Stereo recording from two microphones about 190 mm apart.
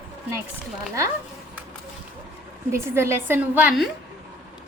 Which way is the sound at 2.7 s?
15° right (ahead or behind).